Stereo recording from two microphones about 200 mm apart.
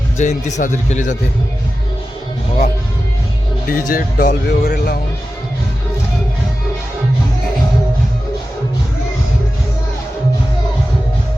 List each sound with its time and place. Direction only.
0.2 s a man's voice: 35° left (ahead or behind)
3.7 s speech: 45° left (ahead or behind)